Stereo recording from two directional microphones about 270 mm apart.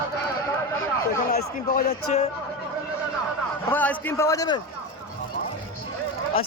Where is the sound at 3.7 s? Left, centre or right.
Centre.